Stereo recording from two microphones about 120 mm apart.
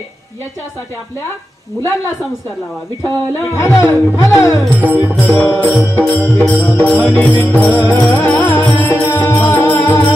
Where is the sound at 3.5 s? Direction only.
25° left (ahead or behind).